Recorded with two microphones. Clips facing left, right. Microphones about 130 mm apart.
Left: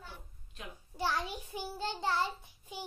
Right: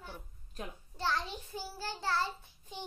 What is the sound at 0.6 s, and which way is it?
Speech, 40° right (ahead or behind).